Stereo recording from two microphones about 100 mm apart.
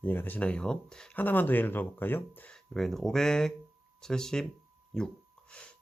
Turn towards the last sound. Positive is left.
turn(degrees=10)  # may be behind; listen again after turning